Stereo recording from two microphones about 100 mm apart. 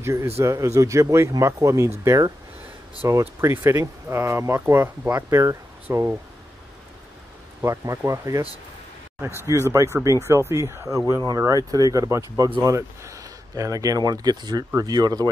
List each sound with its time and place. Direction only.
0.0 s speech: 25° right (ahead or behind)
7.6 s speech: 30° right (ahead or behind)
9.5 s speech: 30° right (ahead or behind)